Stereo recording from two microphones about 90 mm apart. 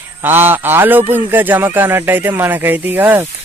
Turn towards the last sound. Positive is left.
turn(degrees=-20)  # may be behind; listen again after turning